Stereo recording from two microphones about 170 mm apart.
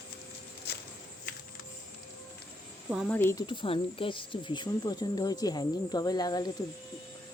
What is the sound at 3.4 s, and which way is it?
Speech, 30° left (ahead or behind).